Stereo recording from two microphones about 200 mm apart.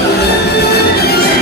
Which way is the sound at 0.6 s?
50° left (ahead or behind).